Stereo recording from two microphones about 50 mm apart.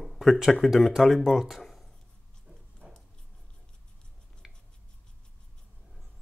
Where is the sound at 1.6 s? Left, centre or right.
Centre.